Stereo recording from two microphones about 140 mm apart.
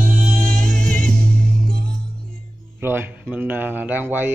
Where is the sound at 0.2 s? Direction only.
5° left (ahead or behind).